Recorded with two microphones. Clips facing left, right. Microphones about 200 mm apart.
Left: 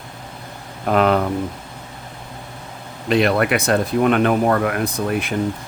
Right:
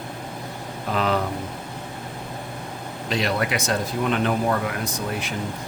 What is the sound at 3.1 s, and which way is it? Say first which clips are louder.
Speech: left 8 dB; 60° left (ahead or behind).